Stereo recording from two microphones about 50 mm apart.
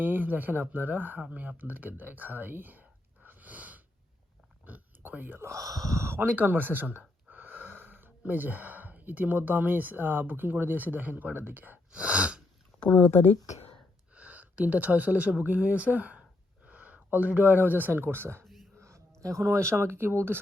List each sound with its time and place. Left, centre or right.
0.0 s speech: right
3.2 s a sound: right
5.8 s a sound: right
6.1 s speech: right
11.9 s sneeze: right
12.8 s speech: left
14.1 s speech: right
18.8 s a sound: right
19.2 s speech: right